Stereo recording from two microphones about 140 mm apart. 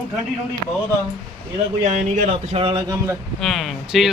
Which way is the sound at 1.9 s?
55° right (ahead or behind).